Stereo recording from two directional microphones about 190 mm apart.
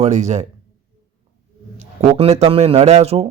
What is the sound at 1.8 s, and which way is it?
Speech, 35° right (ahead or behind).